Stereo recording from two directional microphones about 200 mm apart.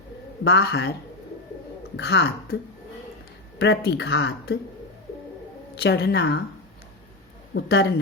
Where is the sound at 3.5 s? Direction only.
55° left (ahead or behind).